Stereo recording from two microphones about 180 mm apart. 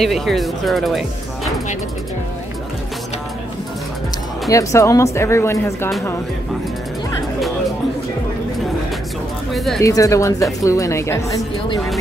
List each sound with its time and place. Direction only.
0.0 s speech: centre (ahead or behind)
4.5 s speech: 15° left (ahead or behind)
9.8 s speech: 20° left (ahead or behind)